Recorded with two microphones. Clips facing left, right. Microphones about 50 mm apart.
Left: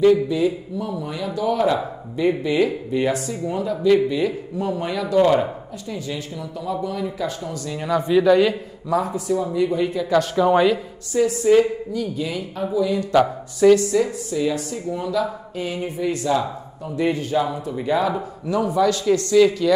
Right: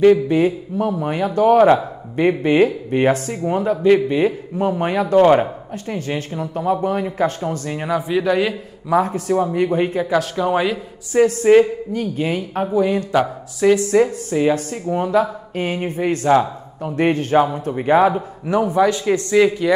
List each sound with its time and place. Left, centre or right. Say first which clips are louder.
0.0 s a man's voice: right 3 dB; right
7.9 s speech: left 3 dB; centre
8.9 s a man's voice: right 4 dB; right
10.1 s speech: left 3 dB; centre
11.1 s speech: right 4 dB; right